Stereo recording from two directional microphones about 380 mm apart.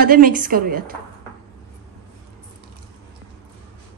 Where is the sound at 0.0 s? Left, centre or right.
Right.